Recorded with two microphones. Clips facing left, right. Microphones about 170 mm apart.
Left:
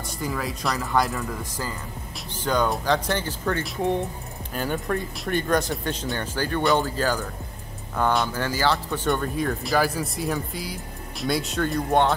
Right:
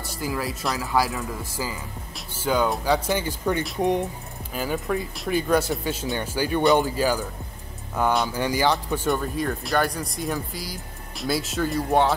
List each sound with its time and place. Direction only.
0.2 s speech: 5° right (ahead or behind)
4.6 s speech: centre (ahead or behind)
8.3 s speech: 15° right (ahead or behind)